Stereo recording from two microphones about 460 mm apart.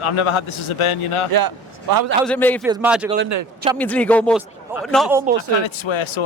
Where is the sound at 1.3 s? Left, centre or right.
Right.